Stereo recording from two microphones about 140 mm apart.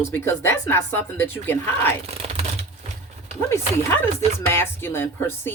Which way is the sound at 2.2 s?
50° right (ahead or behind).